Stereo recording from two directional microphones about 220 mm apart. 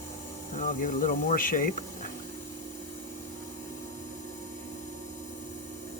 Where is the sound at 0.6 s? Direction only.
35° left (ahead or behind).